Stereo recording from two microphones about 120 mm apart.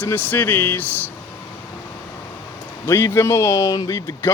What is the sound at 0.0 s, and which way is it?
Speech, 15° left (ahead or behind).